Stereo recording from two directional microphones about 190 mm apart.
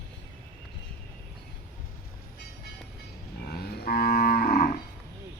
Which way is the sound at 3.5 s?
55° left (ahead or behind).